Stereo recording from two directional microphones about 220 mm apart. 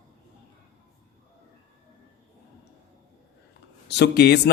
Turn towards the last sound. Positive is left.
turn(degrees=45)  # may be behind; listen again after turning